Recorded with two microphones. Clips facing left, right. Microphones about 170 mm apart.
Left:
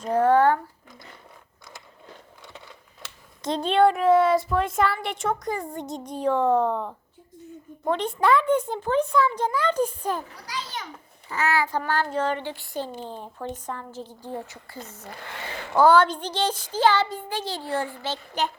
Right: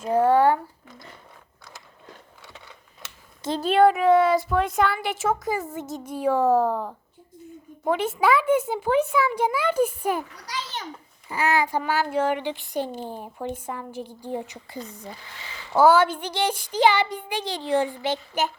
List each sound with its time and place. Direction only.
0.0 s speech: 5° right (ahead or behind)
3.4 s a child's voice: 5° right (ahead or behind)
11.3 s a child's voice: 15° right (ahead or behind)
15.0 s speech: 60° left (ahead or behind)
15.7 s a child's voice: 5° right (ahead or behind)